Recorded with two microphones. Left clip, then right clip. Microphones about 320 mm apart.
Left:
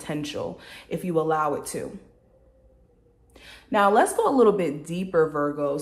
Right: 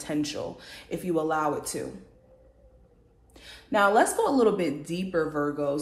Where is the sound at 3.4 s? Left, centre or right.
Centre.